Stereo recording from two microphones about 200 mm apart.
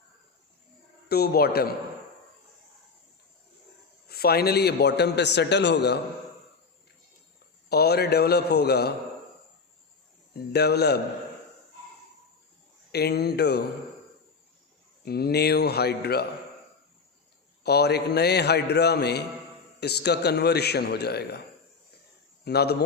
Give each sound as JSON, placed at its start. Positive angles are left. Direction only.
{"t": 1.0, "sound": "a man's voice", "side_deg": 50}
{"t": 4.1, "sound": "a man's voice", "side_deg": 50}
{"t": 7.7, "sound": "a man's voice", "side_deg": 50}
{"t": 10.5, "sound": "a man's voice", "side_deg": 55}
{"t": 12.9, "sound": "a man's voice", "side_deg": 55}
{"t": 15.0, "sound": "a man's voice", "side_deg": 50}
{"t": 17.6, "sound": "a man's voice", "side_deg": 55}
{"t": 22.4, "sound": "a man's voice", "side_deg": 55}